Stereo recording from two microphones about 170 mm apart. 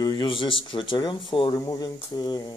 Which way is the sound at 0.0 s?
25° left (ahead or behind).